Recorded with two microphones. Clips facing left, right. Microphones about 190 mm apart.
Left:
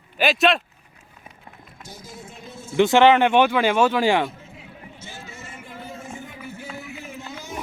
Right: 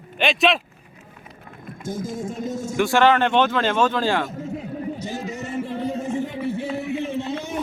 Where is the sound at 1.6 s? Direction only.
50° right (ahead or behind).